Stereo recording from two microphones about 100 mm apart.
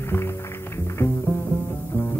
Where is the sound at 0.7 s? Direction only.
25° left (ahead or behind).